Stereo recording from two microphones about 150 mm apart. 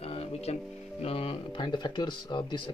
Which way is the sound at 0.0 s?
40° left (ahead or behind).